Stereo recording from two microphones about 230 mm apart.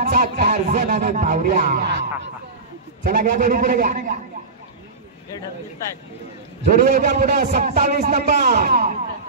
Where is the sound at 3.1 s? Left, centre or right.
Right.